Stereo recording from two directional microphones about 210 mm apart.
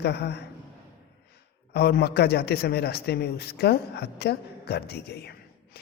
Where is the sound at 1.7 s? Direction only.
50° left (ahead or behind).